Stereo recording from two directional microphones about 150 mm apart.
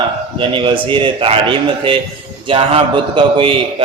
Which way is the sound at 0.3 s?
35° right (ahead or behind).